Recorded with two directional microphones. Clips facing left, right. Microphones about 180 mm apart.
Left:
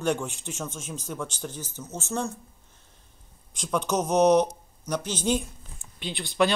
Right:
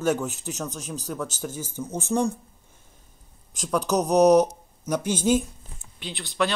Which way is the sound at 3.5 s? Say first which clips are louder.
Right 3 dB; centre (ahead or behind).